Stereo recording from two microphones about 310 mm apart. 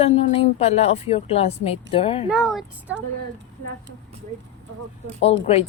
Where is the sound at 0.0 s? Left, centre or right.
Left.